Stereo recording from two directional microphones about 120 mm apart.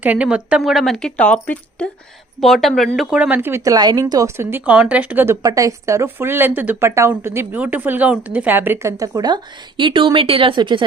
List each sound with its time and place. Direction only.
0.0 s speech: 10° right (ahead or behind)
3.2 s speech: 15° right (ahead or behind); by 10.8 s 45° right (ahead or behind)